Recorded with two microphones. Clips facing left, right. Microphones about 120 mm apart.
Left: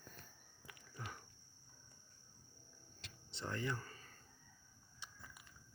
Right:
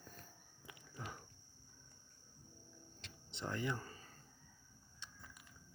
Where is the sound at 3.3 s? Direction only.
15° right (ahead or behind).